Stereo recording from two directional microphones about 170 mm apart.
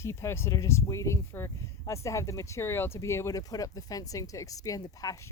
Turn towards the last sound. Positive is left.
turn(degrees=20)  # may be behind; listen again after turning